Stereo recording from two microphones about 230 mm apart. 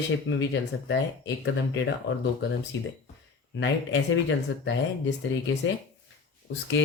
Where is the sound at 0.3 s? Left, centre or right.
Left.